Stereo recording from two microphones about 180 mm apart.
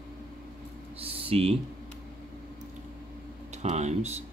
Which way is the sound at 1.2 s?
35° right (ahead or behind).